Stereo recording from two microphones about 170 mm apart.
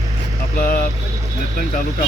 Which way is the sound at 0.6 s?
55° left (ahead or behind).